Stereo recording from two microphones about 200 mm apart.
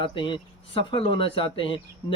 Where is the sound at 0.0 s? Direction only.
25° left (ahead or behind).